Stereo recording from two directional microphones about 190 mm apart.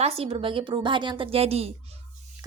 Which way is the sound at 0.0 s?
30° right (ahead or behind).